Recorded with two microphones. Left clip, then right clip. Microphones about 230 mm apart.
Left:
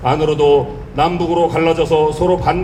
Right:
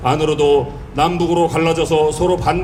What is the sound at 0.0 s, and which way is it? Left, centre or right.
A man's voice, right.